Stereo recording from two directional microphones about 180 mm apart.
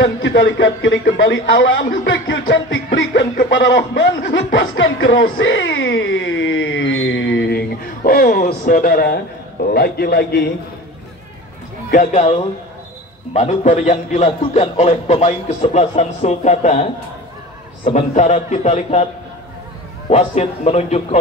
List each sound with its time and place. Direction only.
0.0 s a man's voice: 90° left
5.4 s a sound: 90° left; by 10.5 s 60° left (ahead or behind)
11.9 s a man's voice: 40° left (ahead or behind)
20.1 s a man's voice: 35° left (ahead or behind)